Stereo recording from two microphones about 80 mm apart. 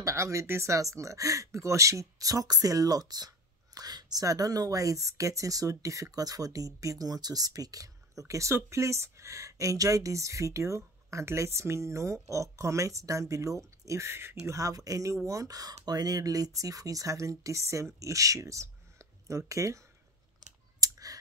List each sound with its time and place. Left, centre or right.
0.0 s speech: right
20.8 s clicking: right